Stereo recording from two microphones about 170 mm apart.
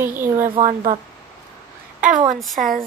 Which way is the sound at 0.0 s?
15° right (ahead or behind).